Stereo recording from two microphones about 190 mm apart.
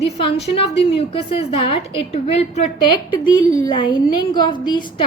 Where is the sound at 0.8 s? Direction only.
30° left (ahead or behind).